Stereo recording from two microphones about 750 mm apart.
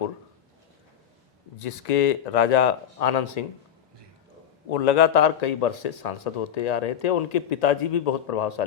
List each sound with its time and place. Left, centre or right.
1.5 s speech: left
4.7 s speech: left